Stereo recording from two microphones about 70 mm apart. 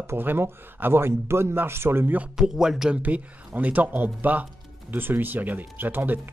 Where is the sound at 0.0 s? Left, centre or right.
Right.